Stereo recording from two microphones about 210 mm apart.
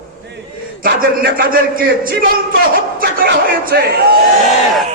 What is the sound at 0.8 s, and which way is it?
A man's voice, 45° right (ahead or behind).